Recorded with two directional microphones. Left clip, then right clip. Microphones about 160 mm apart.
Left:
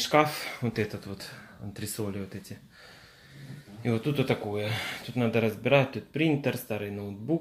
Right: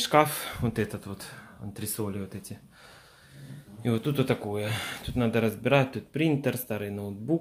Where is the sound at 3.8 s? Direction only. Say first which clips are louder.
Right 1 dB; 20° right (ahead or behind).